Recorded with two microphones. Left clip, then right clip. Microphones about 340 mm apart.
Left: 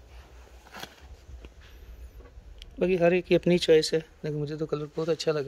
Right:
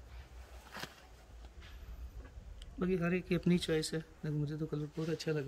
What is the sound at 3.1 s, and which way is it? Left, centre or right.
Speech, centre.